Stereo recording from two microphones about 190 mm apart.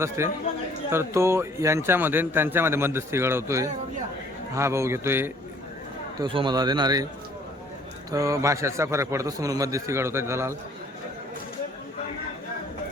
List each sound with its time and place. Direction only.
0.2 s speech: 15° right (ahead or behind)
6.1 s a man's voice: 25° right (ahead or behind)
8.1 s speech: 15° right (ahead or behind)